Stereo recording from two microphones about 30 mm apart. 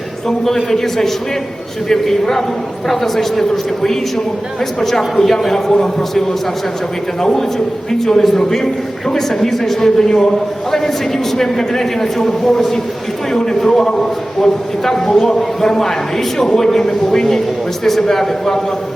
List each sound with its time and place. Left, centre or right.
0.3 s a man's voice: centre
14.4 s a man's voice: centre